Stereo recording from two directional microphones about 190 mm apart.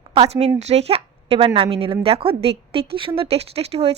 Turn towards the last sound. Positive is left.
turn(degrees=-35)  # may be behind; listen again after turning